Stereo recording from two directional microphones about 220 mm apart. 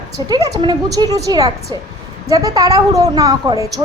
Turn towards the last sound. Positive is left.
turn(degrees=-15)  # may be behind; listen again after turning